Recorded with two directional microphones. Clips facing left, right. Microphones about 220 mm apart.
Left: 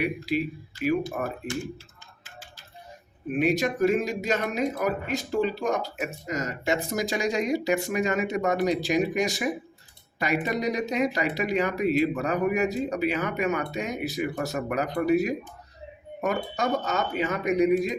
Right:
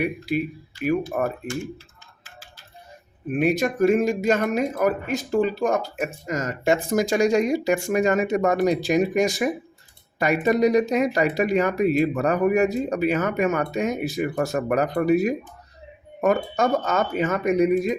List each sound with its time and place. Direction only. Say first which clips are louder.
1.2 s speech: right 6 dB; 45° right (ahead or behind)
3.3 s speech: right 3 dB; 50° right (ahead or behind)